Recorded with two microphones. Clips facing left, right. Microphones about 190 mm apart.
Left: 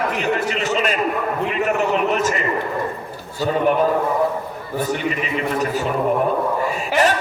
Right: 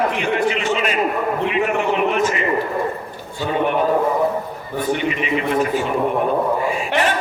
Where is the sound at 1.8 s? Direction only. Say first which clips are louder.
Right 1 dB; 40° left (ahead or behind).